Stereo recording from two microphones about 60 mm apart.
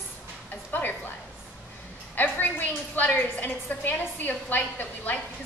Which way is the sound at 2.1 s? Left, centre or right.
Left.